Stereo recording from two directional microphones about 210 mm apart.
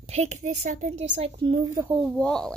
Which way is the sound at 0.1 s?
30° right (ahead or behind).